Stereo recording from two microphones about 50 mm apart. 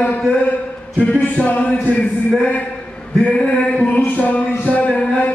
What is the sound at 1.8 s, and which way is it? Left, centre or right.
Speech, left.